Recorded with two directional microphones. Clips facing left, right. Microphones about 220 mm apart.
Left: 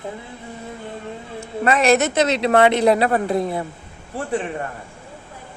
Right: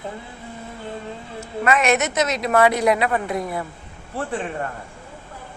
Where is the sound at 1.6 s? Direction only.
35° left (ahead or behind).